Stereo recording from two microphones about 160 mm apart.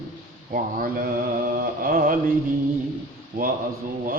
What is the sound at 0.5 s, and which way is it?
Mantra, 65° right (ahead or behind).